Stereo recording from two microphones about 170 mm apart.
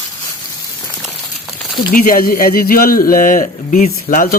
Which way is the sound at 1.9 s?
55° left (ahead or behind).